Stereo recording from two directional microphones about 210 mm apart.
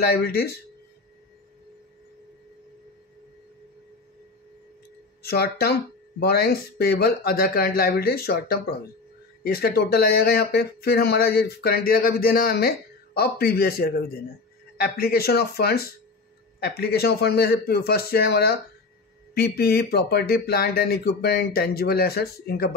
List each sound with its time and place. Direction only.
0.0 s speech: 50° left (ahead or behind)
5.2 s speech: 50° left (ahead or behind)